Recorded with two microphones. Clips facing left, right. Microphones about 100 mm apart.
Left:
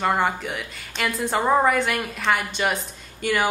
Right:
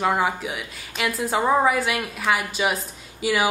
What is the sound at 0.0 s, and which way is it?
A woman's voice, 5° right (ahead or behind).